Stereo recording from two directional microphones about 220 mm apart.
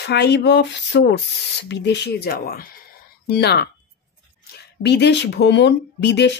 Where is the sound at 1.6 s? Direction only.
50° left (ahead or behind).